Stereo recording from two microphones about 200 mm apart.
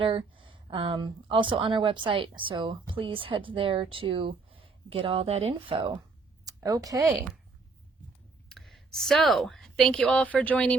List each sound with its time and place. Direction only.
0.0 s speech: 25° right (ahead or behind)
8.4 s a woman's voice: centre (ahead or behind)